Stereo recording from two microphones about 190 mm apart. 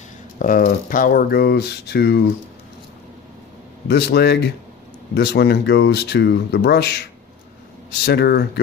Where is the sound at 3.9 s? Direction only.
60° left (ahead or behind).